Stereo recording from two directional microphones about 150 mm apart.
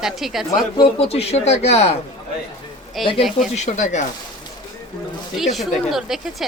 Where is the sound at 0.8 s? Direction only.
40° left (ahead or behind).